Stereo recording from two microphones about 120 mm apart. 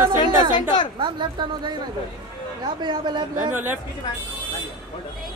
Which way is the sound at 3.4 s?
15° right (ahead or behind).